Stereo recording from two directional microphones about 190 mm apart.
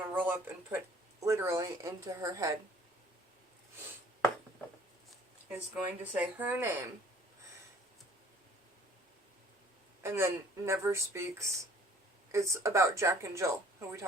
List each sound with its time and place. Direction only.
0.1 s speech: 10° right (ahead or behind)
5.7 s speech: 10° right (ahead or behind)
10.0 s speech: 15° right (ahead or behind)